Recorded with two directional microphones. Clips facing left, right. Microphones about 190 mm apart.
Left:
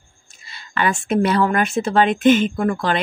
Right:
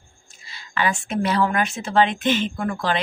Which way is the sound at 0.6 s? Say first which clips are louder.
Left 3 dB; 55° left (ahead or behind).